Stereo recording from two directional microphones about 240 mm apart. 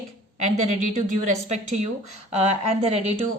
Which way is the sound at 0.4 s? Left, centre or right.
Right.